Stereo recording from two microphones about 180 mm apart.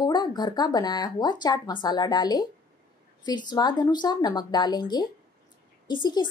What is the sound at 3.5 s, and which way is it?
Speech, 25° left (ahead or behind).